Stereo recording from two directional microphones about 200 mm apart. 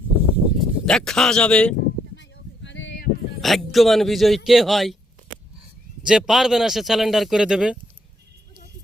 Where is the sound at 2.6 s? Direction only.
65° left (ahead or behind).